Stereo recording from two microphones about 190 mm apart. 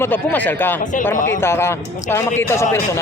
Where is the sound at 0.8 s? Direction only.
40° left (ahead or behind).